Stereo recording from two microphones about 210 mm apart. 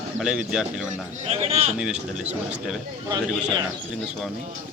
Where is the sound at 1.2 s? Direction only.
30° right (ahead or behind).